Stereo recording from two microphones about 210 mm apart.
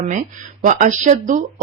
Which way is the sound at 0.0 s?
35° right (ahead or behind).